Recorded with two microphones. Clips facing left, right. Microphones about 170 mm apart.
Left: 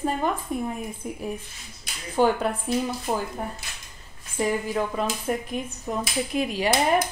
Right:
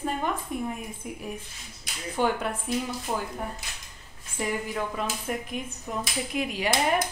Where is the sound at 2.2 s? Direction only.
35° left (ahead or behind).